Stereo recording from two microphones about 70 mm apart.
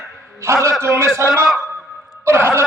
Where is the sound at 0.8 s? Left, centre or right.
Right.